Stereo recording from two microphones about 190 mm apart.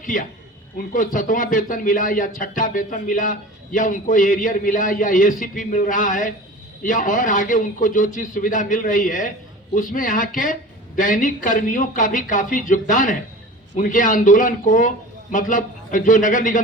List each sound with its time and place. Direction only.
0.0 s speech: 45° left (ahead or behind)